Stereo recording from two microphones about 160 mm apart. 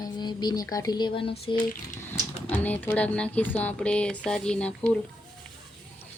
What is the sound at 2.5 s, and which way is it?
Speech, 10° left (ahead or behind).